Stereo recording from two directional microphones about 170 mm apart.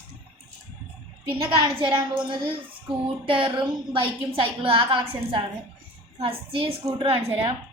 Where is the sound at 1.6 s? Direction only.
30° right (ahead or behind).